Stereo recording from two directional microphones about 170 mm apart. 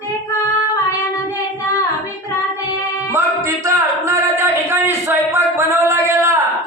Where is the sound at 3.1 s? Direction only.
15° right (ahead or behind).